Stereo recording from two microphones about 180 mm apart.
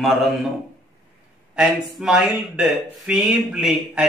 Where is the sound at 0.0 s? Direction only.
Centre (ahead or behind).